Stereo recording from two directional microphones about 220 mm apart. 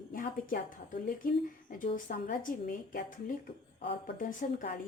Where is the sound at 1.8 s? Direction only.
40° left (ahead or behind).